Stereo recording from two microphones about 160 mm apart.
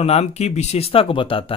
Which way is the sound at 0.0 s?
40° left (ahead or behind).